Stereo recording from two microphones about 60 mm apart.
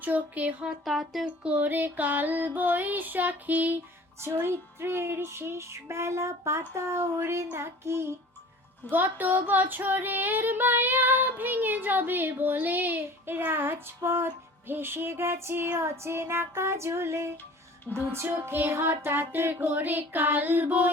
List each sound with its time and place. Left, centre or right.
0.0 s music: right
0.9 s speech: centre
1.2 s music: right
4.4 s music: right
8.9 s child singing: right
15.8 s music: right
17.9 s child singing: right